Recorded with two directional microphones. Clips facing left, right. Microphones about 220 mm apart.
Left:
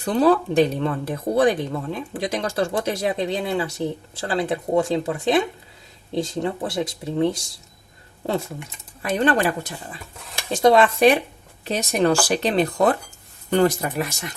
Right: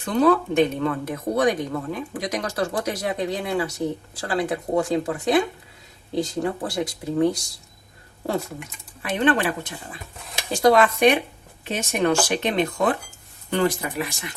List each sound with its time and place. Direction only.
0.0 s speech: 35° left (ahead or behind)
9.0 s speech: 40° left (ahead or behind)
10.5 s speech: 25° left (ahead or behind); by 14.3 s 45° left (ahead or behind)